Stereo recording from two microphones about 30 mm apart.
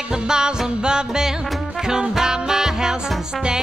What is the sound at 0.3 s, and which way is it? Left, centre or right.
Music, right.